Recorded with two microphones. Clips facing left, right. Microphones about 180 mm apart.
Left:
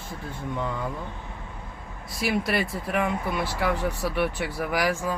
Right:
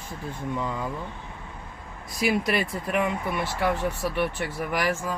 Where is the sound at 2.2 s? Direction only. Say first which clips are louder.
Right 1 dB; centre (ahead or behind).